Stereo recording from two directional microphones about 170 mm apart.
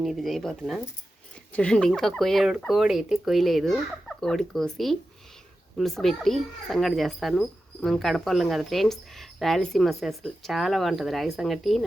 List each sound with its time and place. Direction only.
0.0 s speech: centre (ahead or behind)